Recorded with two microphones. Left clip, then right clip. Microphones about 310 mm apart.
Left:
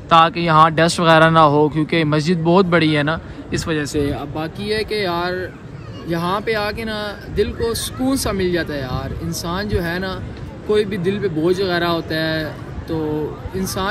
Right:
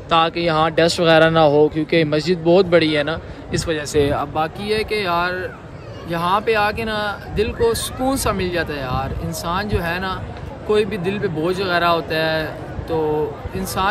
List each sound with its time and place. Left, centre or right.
0.1 s speech: centre
3.9 s speech: right
4.9 s speech: centre